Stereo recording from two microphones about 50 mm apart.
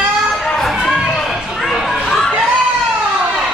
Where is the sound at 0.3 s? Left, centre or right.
Centre.